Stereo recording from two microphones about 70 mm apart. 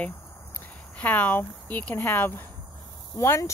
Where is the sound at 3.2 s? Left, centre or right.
Left.